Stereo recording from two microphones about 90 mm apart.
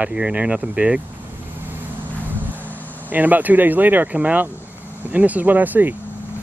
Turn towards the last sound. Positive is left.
turn(degrees=-20)  # may be behind; listen again after turning